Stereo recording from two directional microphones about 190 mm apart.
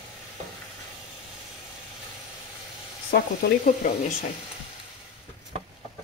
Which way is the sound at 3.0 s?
45° left (ahead or behind).